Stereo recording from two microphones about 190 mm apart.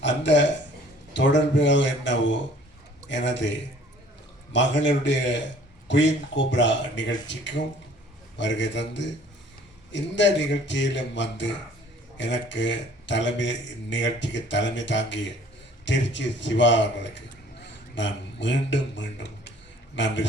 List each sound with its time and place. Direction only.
0.0 s burping: 70° left (ahead or behind)
1.1 s a man's voice: 70° left (ahead or behind)